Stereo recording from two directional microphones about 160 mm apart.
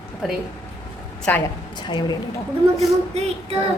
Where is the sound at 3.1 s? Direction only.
40° right (ahead or behind).